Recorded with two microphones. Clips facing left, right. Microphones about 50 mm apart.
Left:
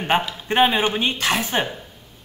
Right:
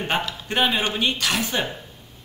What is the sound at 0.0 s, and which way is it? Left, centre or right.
Speech, centre.